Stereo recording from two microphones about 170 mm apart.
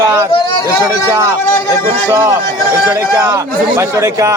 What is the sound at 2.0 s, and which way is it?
A man's voice, 20° right (ahead or behind).